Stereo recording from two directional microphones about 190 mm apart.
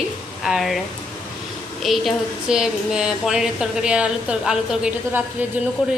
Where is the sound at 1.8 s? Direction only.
Centre (ahead or behind).